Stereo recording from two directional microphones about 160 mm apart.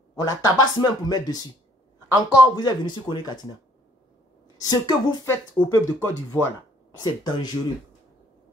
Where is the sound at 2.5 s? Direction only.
25° left (ahead or behind).